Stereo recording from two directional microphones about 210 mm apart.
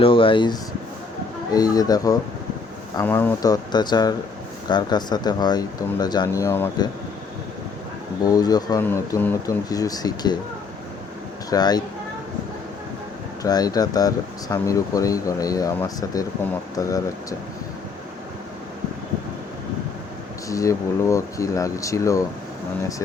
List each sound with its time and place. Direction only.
0.0 s speech: 25° left (ahead or behind)
8.2 s speech: 20° left (ahead or behind)
11.5 s speech: 20° left (ahead or behind)
13.4 s speech: 20° left (ahead or behind)
20.5 s speech: 15° left (ahead or behind)